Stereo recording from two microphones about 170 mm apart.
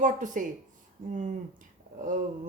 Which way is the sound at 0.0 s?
50° right (ahead or behind).